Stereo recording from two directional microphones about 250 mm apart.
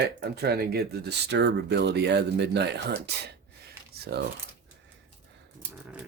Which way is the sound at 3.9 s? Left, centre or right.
Right.